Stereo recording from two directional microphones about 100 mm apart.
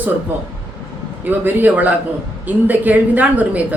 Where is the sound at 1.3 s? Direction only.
20° right (ahead or behind).